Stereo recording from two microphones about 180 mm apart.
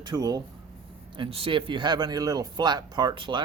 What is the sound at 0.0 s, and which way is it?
Speech, 25° right (ahead or behind).